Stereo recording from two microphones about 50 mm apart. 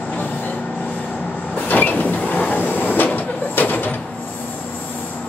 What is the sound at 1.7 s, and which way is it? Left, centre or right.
Train, left.